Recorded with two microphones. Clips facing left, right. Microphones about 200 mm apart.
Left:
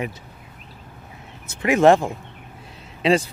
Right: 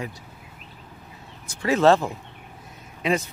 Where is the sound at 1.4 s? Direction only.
20° left (ahead or behind).